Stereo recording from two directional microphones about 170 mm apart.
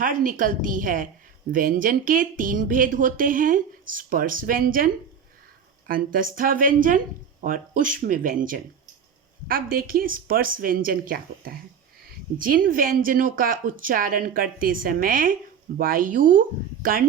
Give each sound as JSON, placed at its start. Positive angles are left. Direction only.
{"t": 0.0, "sound": "speech", "side_deg": -50}
{"t": 5.9, "sound": "speech", "side_deg": -55}